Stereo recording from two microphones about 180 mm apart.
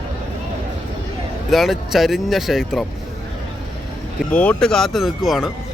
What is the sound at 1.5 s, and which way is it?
Speech, centre (ahead or behind).